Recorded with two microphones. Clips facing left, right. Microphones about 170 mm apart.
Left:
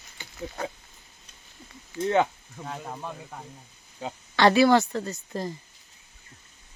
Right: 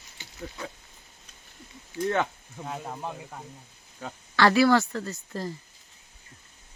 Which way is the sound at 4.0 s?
20° left (ahead or behind).